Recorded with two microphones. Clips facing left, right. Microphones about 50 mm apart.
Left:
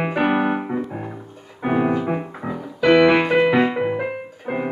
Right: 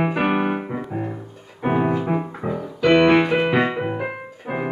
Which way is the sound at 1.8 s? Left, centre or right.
Centre.